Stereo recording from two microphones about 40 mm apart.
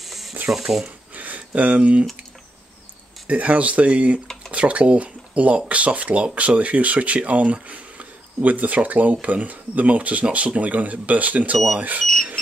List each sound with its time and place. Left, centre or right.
0.0 s ratchet: centre
0.5 s speech: centre
1.1 s a sound: right
3.3 s speech: right